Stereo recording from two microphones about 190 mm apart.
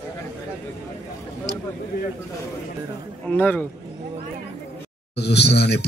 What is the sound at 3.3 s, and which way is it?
Speech, 10° left (ahead or behind).